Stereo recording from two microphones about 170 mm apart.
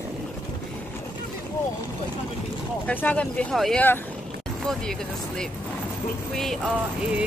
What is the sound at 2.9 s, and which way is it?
Speech, 10° left (ahead or behind).